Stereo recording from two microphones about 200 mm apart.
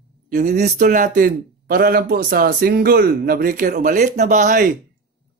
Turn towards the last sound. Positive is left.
turn(degrees=-40)  # may be behind; listen again after turning